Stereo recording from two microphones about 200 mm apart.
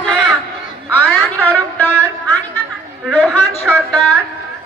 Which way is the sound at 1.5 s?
10° left (ahead or behind).